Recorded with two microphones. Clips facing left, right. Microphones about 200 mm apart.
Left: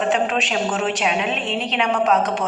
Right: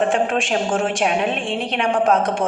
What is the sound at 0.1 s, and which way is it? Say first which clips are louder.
A woman's voice: right 1 dB; 50° right (ahead or behind).